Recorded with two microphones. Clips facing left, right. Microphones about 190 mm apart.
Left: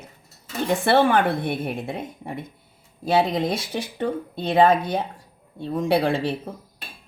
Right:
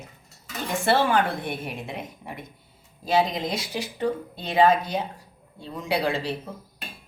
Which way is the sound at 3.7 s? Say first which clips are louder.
Left 1 dB; 55° left (ahead or behind).